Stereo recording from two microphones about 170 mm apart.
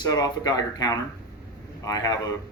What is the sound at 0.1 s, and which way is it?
Speech, 25° left (ahead or behind).